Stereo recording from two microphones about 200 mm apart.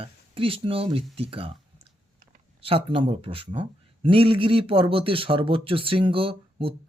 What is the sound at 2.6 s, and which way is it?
Speech, 25° right (ahead or behind).